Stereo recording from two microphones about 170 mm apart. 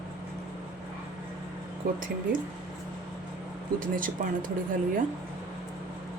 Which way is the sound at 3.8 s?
50° right (ahead or behind).